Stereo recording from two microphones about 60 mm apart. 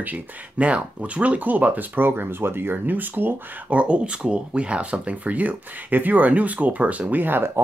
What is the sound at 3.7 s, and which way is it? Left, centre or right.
Speech, centre.